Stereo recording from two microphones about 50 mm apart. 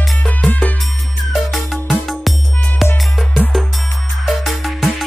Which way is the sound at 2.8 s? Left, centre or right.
Centre.